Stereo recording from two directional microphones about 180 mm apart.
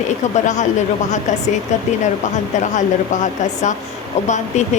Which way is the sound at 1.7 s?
40° left (ahead or behind).